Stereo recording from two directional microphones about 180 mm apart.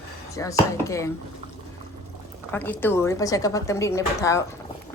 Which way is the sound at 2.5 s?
10° left (ahead or behind).